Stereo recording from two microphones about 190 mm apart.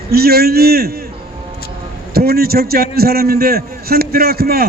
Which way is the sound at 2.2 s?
55° right (ahead or behind).